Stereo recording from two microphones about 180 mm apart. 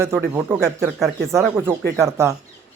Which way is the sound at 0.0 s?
15° right (ahead or behind).